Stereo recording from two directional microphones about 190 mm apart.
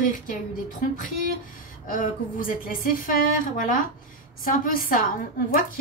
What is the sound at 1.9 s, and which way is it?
A woman's voice, 45° left (ahead or behind).